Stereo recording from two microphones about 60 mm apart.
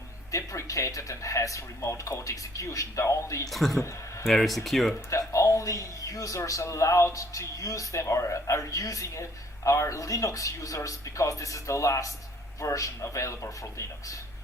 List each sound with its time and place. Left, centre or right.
0.3 s speech: left
3.5 s speech: centre
5.3 s speech: left